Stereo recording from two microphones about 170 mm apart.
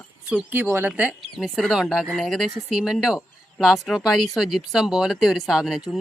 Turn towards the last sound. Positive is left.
turn(degrees=0)  # may be behind; listen again after turning